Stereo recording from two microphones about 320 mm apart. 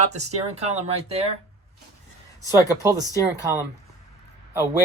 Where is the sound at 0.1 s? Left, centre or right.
Right.